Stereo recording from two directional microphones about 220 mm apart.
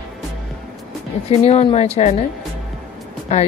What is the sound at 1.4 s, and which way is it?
Speech, 30° left (ahead or behind).